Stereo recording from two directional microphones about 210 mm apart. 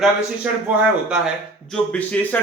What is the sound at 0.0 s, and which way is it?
A man's voice, 5° right (ahead or behind).